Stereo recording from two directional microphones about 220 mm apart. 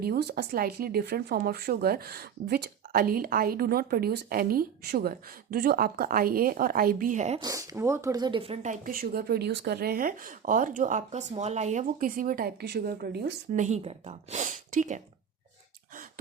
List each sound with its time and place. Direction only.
0.0 s speech: 45° right (ahead or behind)
7.3 s speech: 15° right (ahead or behind); by 15.0 s 35° right (ahead or behind)